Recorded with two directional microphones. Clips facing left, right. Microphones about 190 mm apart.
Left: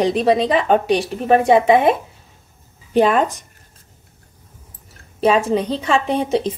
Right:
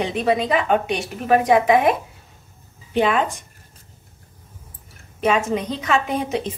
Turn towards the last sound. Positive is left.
turn(degrees=30)  # may be behind; listen again after turning